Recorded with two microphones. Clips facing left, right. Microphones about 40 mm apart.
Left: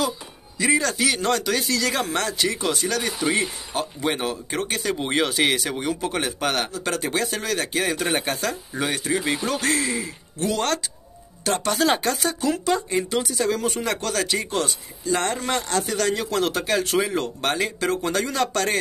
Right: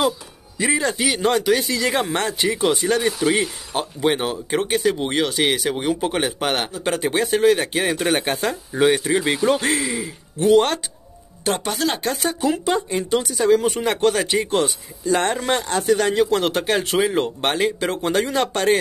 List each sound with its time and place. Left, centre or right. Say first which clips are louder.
0.6 s speech: right 1 dB; right
5.1 s speech: right 1 dB; centre
5.8 s speech: right 4 dB; right
9.8 s speech: right 1 dB; centre
10.4 s speech: right 8 dB; right
11.7 s speech: left 2 dB; centre
12.3 s speech: right 3 dB; right
13.4 s speech: right 9 dB; centre
13.7 s speech: right 6 dB; right